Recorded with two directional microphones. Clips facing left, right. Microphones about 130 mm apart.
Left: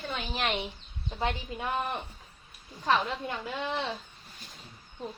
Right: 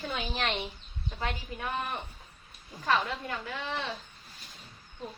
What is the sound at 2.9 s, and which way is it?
Speech, 15° left (ahead or behind).